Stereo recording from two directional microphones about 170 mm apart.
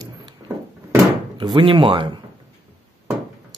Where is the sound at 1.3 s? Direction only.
30° right (ahead or behind).